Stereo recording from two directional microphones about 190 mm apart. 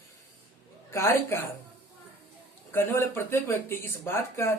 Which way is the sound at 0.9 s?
15° left (ahead or behind).